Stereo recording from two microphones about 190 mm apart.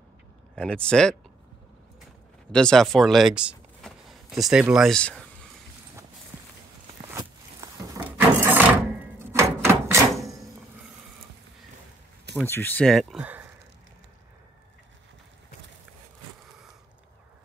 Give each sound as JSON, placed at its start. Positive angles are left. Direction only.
{"t": 0.6, "sound": "speech", "side_deg": 5}
{"t": 2.5, "sound": "speech", "side_deg": 5}
{"t": 7.1, "sound": "a sound", "side_deg": -20}
{"t": 8.0, "sound": "wood", "side_deg": -10}
{"t": 12.4, "sound": "speech", "side_deg": 10}